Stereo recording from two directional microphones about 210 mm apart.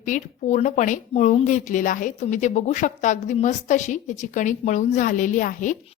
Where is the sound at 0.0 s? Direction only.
35° left (ahead or behind).